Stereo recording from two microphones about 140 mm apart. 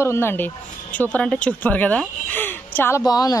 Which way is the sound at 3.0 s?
25° left (ahead or behind).